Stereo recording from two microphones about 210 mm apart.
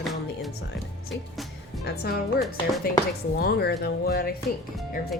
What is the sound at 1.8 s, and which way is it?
Speech, 45° left (ahead or behind).